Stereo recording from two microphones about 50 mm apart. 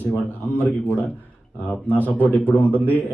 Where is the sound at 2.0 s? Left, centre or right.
Left.